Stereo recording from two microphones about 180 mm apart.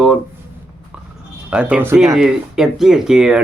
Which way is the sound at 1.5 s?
5° right (ahead or behind).